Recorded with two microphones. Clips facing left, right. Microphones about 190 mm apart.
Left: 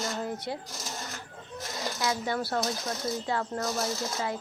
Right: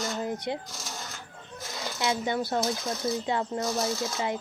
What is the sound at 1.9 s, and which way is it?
A woman's voice, 20° right (ahead or behind).